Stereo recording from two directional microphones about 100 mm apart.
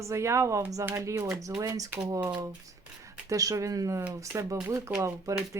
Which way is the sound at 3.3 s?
35° right (ahead or behind).